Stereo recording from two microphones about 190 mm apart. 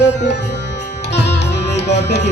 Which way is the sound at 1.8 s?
65° left (ahead or behind).